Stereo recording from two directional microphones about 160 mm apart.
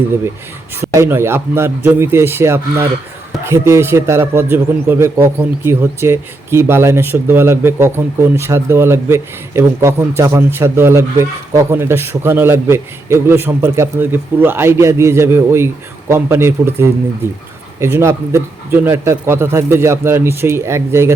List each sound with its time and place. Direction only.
0.9 s a man's voice: 15° right (ahead or behind)